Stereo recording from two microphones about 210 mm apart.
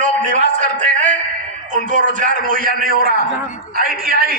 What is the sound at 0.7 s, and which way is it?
Music, 35° right (ahead or behind).